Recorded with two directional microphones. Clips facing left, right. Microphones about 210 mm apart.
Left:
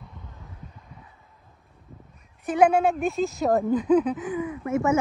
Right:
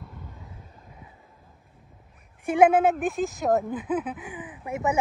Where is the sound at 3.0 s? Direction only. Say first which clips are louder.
Left 2 dB; 15° right (ahead or behind).